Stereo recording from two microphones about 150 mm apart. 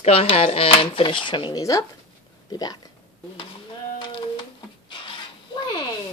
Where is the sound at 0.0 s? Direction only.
40° left (ahead or behind).